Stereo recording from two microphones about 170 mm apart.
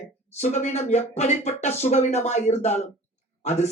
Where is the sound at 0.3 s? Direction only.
40° left (ahead or behind).